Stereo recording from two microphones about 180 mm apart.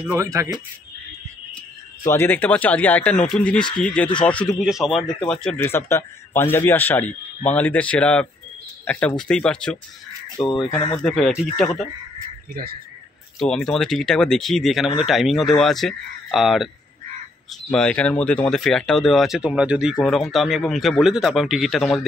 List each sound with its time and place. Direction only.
0.1 s speech: 15° right (ahead or behind)
2.0 s a man's voice: 10° left (ahead or behind)
12.6 s speech: 50° right (ahead or behind)
13.4 s speech: centre (ahead or behind)